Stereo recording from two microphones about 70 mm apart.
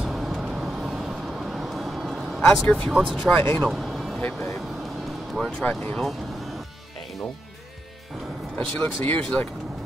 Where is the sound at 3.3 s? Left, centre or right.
Left.